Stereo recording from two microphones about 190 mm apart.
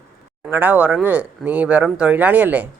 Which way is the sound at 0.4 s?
10° right (ahead or behind).